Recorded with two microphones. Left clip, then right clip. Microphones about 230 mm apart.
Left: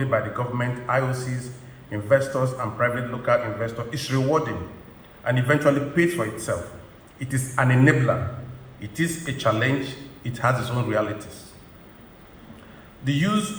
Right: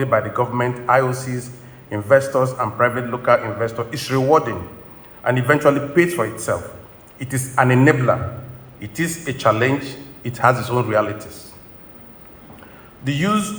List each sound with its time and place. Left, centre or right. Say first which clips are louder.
0.0 s a man's voice: right 6 dB; right
13.1 s a man's voice: right 4 dB; right